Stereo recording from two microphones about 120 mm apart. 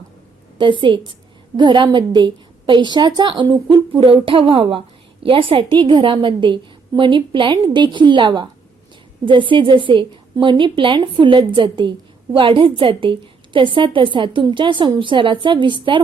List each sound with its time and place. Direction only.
0.6 s a woman's voice: 45° right (ahead or behind)